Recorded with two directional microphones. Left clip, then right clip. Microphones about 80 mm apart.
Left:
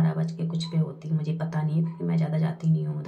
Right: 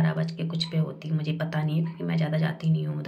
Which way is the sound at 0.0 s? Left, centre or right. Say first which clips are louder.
Right 1 dB; left.